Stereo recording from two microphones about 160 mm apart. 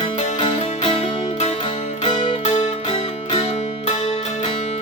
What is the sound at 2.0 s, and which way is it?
Music, 35° left (ahead or behind).